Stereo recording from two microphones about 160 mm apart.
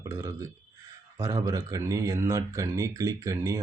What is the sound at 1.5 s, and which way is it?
Speech, 20° right (ahead or behind).